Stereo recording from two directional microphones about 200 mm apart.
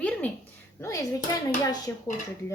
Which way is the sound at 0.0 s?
5° left (ahead or behind).